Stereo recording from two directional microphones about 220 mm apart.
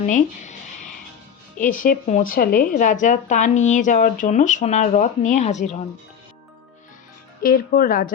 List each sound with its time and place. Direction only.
0.0 s a woman's voice: 35° left (ahead or behind)
1.5 s a woman's voice: 35° left (ahead or behind)
7.4 s a woman's voice: 40° left (ahead or behind)